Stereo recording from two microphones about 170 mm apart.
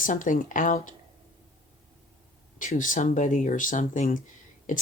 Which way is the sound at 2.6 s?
50° left (ahead or behind).